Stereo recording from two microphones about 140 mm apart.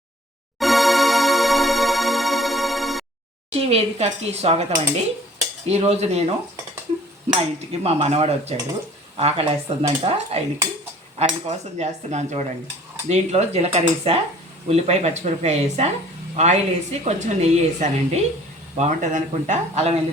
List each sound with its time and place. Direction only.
0.6 s music: centre (ahead or behind)
3.5 s a woman's voice: 45° right (ahead or behind)
7.3 s a woman's voice: 45° right (ahead or behind)
11.4 s a woman's voice: 55° right (ahead or behind)